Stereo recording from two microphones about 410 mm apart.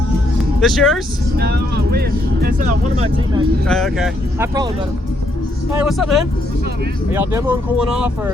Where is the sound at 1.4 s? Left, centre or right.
Right.